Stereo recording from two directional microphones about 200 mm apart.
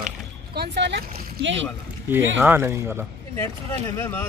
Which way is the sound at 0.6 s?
55° right (ahead or behind).